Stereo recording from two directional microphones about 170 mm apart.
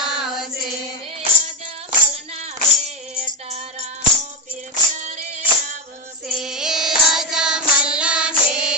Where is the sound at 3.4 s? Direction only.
40° right (ahead or behind).